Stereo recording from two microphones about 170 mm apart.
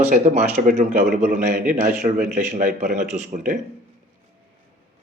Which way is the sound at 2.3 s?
50° right (ahead or behind).